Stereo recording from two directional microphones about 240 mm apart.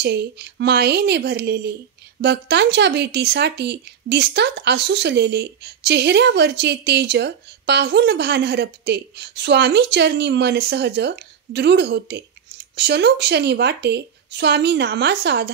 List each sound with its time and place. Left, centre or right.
0.0 s speech: right